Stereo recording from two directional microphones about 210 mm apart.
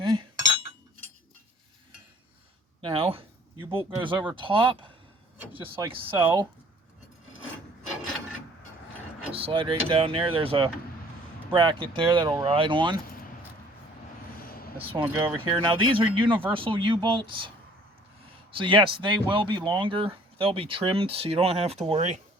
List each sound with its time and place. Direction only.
0.0 s cutlery: 25° right (ahead or behind)
2.8 s speech: 25° right (ahead or behind)
5.4 s speech: 10° right (ahead or behind)
9.3 s speech: 25° right (ahead or behind)
14.3 s a sound: 45° left (ahead or behind)
15.0 s speech: 10° right (ahead or behind)
15.6 s speech: 25° right (ahead or behind)
18.5 s speech: 25° right (ahead or behind)